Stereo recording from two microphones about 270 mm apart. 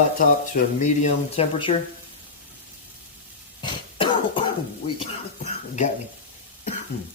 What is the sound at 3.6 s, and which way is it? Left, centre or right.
Cough, centre.